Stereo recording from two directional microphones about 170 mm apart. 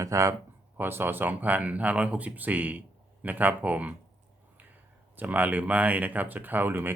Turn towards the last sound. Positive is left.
turn(degrees=-10)  # may be behind; listen again after turning